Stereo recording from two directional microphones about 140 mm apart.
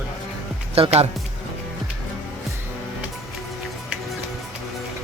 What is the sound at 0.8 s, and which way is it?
Speech, 45° right (ahead or behind).